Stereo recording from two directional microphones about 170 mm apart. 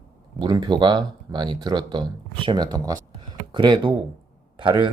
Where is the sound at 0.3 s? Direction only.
25° right (ahead or behind).